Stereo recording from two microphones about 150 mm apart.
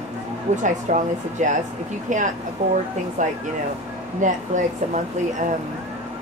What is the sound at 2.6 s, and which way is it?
Speech, 45° right (ahead or behind).